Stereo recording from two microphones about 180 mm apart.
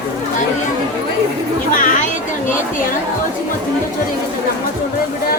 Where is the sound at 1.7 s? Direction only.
45° left (ahead or behind).